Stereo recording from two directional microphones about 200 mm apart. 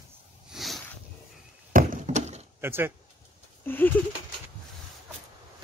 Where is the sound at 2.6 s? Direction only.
10° right (ahead or behind).